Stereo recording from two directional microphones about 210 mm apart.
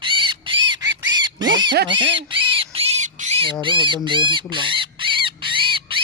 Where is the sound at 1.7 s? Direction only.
60° right (ahead or behind).